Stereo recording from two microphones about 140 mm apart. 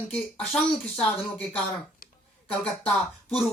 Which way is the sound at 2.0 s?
90° left.